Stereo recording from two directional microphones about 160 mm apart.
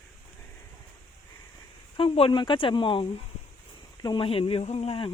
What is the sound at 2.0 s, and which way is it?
Speech, 35° left (ahead or behind).